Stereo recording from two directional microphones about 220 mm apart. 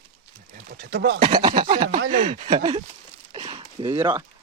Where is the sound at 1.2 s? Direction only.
20° right (ahead or behind).